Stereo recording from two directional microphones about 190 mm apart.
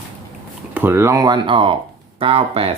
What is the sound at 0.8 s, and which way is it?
Speech, 10° right (ahead or behind).